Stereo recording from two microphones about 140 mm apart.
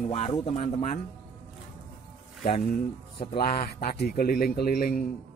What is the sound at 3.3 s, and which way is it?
A man's voice, 90° left.